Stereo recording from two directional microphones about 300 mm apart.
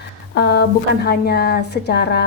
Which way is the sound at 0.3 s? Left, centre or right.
Left.